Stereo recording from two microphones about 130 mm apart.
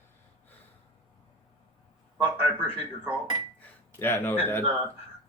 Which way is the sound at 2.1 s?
10° right (ahead or behind).